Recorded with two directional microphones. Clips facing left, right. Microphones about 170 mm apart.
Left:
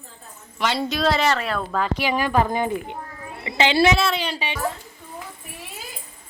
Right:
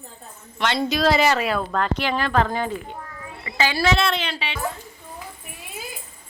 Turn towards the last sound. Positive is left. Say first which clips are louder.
# left 1 dB
turn(degrees=15)  # may be behind; listen again after turning